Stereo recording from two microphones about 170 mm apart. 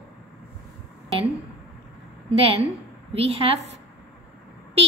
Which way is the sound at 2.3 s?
35° right (ahead or behind).